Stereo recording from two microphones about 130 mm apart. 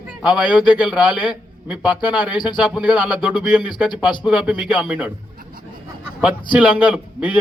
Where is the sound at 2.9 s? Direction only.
10° right (ahead or behind).